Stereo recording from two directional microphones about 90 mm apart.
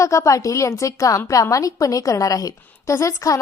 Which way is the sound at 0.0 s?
35° left (ahead or behind).